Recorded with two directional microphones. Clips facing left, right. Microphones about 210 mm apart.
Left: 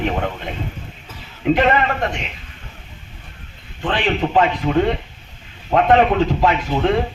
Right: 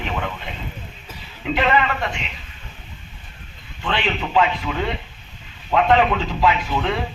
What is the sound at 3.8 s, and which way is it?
A man's voice, 40° left (ahead or behind).